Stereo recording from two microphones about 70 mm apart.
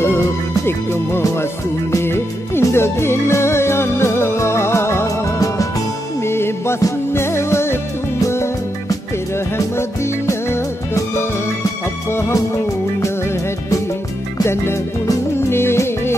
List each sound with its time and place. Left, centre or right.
0.0 s music: left
6.2 s music: left
13.0 s music: left